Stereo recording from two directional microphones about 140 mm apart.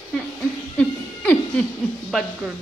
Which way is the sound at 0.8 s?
5° left (ahead or behind).